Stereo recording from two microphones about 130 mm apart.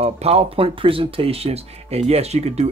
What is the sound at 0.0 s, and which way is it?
Speech, 50° right (ahead or behind).